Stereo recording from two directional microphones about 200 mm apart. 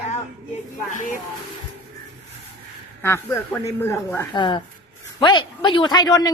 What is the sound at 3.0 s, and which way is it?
A woman's voice, 15° left (ahead or behind).